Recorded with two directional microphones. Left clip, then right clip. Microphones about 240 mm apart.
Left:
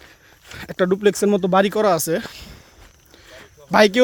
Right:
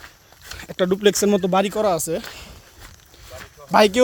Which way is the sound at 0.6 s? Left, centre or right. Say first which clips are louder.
Left 2 dB; left.